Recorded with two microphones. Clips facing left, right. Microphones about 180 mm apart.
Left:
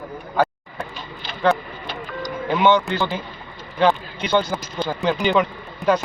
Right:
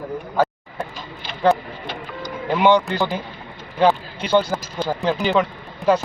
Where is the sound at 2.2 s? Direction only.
5° right (ahead or behind).